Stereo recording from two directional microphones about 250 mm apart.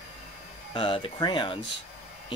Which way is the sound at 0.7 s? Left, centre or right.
Centre.